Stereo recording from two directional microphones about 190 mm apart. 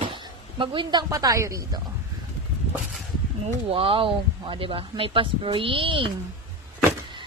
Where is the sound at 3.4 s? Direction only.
30° right (ahead or behind).